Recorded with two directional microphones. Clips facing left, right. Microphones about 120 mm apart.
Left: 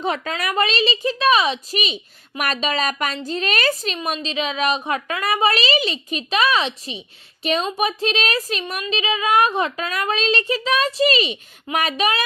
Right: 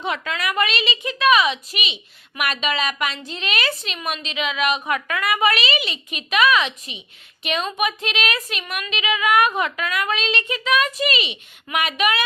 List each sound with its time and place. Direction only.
0.0 s a woman's voice: 35° left (ahead or behind)